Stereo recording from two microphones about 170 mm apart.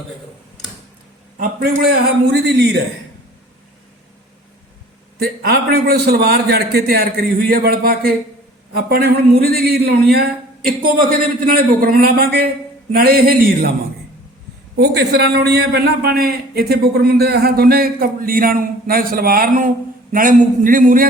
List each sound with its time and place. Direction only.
1.4 s a man's voice: 60° right (ahead or behind); by 2.8 s 75° right (ahead or behind)
5.2 s a man's voice: 65° right (ahead or behind)
14.8 s a man's voice: 70° right (ahead or behind); by 21.1 s 55° right (ahead or behind)